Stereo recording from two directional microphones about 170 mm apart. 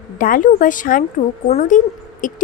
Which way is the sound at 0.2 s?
55° left (ahead or behind).